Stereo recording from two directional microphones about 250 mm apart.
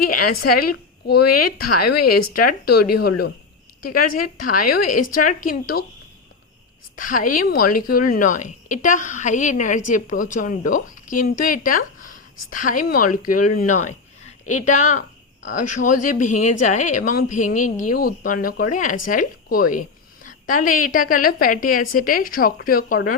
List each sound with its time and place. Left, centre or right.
0.0 s speech: left
3.8 s speech: left
4.8 s speech: left
6.9 s a woman's voice: left